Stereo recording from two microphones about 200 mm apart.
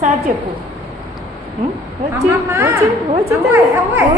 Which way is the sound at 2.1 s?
15° right (ahead or behind).